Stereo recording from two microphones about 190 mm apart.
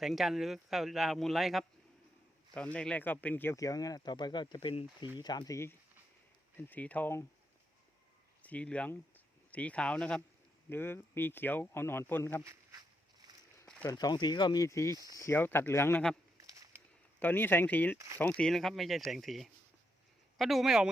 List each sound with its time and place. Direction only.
0.0 s speech: centre (ahead or behind)
8.4 s speech: 5° left (ahead or behind)
14.0 s speech: 20° left (ahead or behind)
17.2 s speech: 10° left (ahead or behind)
17.9 s speech: 15° right (ahead or behind)
18.2 s speech: 5° left (ahead or behind)